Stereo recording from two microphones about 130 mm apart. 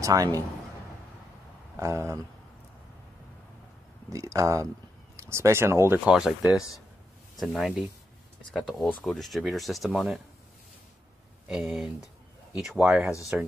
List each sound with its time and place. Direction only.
0.0 s speech: 25° right (ahead or behind)
1.8 s speech: 20° right (ahead or behind)
4.1 s speech: 25° right (ahead or behind)
5.9 s speech: 5° right (ahead or behind)
7.3 s speech: centre (ahead or behind)
11.4 s speech: centre (ahead or behind)